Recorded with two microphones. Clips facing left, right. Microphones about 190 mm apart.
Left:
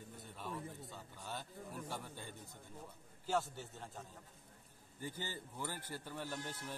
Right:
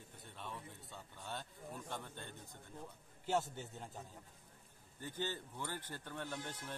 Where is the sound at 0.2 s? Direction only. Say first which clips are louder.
Left 3 dB; centre (ahead or behind).